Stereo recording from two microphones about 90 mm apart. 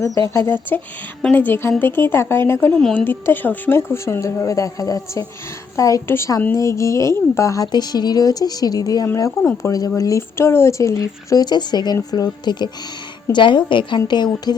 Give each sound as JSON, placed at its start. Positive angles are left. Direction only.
{"t": 0.0, "sound": "a woman's voice", "side_deg": 35}
{"t": 7.7, "sound": "speech", "side_deg": 50}
{"t": 9.4, "sound": "a woman's voice", "side_deg": 30}
{"t": 9.7, "sound": "a woman's voice", "side_deg": 40}